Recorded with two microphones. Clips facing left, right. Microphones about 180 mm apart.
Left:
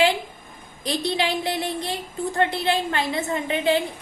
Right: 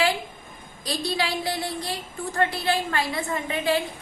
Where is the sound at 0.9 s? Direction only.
20° left (ahead or behind).